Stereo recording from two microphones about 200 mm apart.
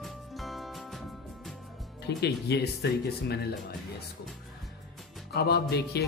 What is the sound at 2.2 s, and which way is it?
Speech, 55° left (ahead or behind).